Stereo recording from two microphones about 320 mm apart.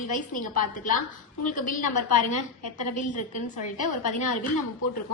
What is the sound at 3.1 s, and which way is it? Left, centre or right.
Speech, left.